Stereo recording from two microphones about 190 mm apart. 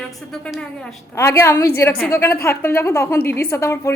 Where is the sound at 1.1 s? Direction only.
15° left (ahead or behind).